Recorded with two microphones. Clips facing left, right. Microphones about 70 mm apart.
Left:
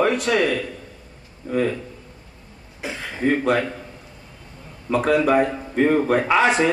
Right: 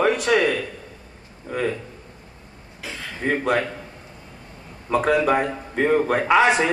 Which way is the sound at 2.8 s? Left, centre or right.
Left.